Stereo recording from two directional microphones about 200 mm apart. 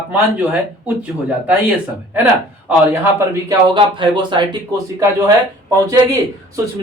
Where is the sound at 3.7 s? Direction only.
25° right (ahead or behind).